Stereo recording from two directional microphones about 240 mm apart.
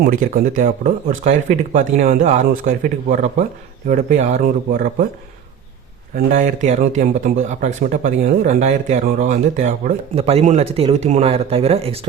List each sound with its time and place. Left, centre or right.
0.0 s speech: right
6.1 s speech: right